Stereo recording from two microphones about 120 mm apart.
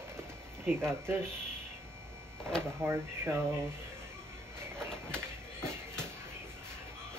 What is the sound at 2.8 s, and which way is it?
Speech, 20° right (ahead or behind).